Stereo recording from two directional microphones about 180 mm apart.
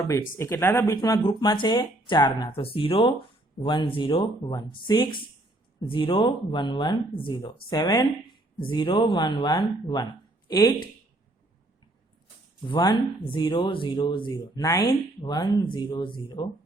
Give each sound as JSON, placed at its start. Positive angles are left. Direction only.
{"t": 0.3, "sound": "speech", "side_deg": 15}
{"t": 12.7, "sound": "speech", "side_deg": 25}